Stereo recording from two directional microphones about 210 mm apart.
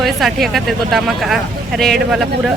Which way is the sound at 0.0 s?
Centre (ahead or behind).